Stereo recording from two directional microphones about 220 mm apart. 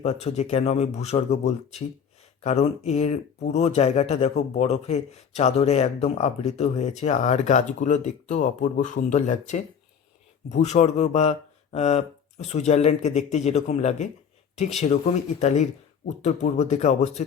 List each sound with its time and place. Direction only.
0.0 s speech: 30° left (ahead or behind)